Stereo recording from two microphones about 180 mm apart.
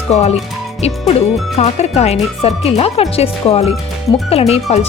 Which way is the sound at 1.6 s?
35° left (ahead or behind).